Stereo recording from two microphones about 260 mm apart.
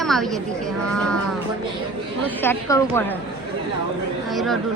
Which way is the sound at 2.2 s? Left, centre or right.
Centre.